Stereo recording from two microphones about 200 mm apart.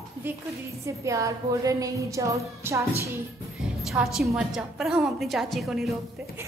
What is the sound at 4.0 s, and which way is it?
A woman's voice, centre (ahead or behind).